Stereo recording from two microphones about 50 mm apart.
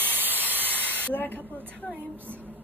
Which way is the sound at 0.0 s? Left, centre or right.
Right.